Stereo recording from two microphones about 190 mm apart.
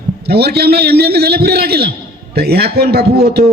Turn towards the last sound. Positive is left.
turn(degrees=-60)  # may be behind; listen again after turning